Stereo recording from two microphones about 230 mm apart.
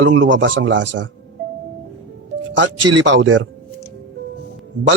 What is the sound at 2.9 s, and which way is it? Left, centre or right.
Speech, right.